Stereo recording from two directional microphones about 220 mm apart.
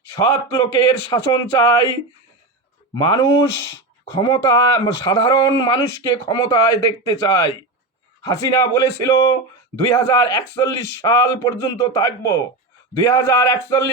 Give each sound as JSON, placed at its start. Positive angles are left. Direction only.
{"t": 0.1, "sound": "speech", "side_deg": 15}